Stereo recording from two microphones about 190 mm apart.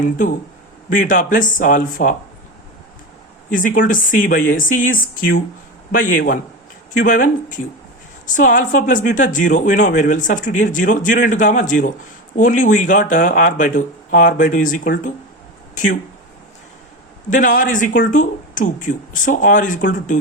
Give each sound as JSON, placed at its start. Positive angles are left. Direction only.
{"t": 0.9, "sound": "speech", "side_deg": 45}
{"t": 3.5, "sound": "speech", "side_deg": 45}
{"t": 17.2, "sound": "speech", "side_deg": 45}